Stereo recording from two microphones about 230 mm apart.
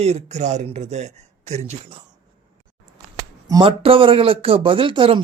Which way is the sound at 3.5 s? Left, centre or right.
Centre.